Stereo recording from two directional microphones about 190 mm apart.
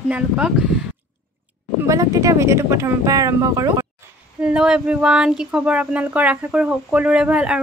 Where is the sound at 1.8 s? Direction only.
15° right (ahead or behind).